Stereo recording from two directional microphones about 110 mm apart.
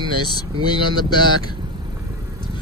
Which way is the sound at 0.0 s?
40° left (ahead or behind).